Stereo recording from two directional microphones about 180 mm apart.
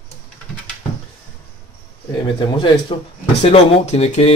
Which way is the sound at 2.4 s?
25° left (ahead or behind).